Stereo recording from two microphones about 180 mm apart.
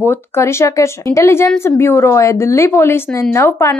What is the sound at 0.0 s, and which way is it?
Speech, 15° left (ahead or behind).